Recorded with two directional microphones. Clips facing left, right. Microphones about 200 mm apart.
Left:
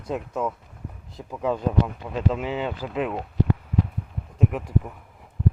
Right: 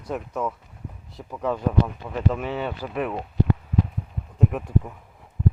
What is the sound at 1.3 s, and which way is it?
Speech, 15° left (ahead or behind).